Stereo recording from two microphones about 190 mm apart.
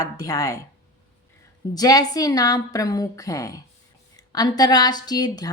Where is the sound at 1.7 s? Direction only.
20° left (ahead or behind).